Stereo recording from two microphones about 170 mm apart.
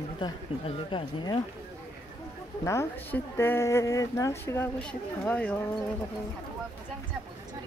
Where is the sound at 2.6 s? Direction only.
15° left (ahead or behind).